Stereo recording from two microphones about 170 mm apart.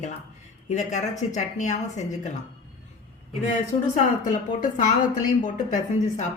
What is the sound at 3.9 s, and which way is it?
Speech, 45° left (ahead or behind).